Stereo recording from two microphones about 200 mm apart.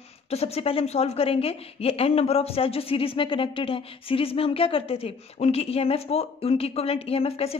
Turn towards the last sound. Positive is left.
turn(degrees=30)  # may be behind; listen again after turning